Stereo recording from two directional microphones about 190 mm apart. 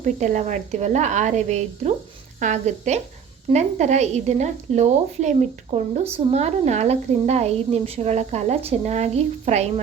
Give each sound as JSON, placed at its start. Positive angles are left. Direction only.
{"t": 0.0, "sound": "a woman's voice", "side_deg": -40}